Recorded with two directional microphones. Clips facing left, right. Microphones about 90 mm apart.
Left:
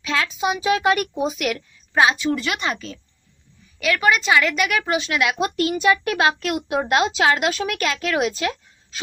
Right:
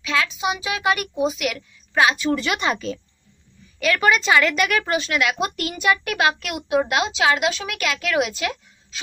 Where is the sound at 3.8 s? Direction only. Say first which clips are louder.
Even; 5° left (ahead or behind); by 6.5 s 30° left (ahead or behind).